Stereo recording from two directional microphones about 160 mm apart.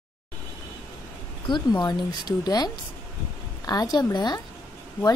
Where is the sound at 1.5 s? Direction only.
25° left (ahead or behind).